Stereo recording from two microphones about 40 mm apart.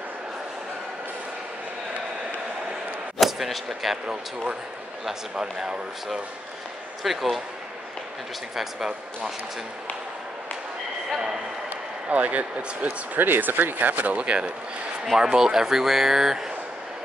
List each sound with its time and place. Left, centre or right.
3.2 s speech: centre
5.3 s speech: centre
7.0 s speech: centre
8.5 s speech: centre
12.1 s speech: right
13.1 s speech: right
15.1 s speech: centre